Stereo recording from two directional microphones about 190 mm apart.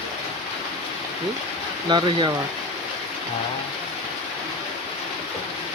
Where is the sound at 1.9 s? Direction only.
25° right (ahead or behind).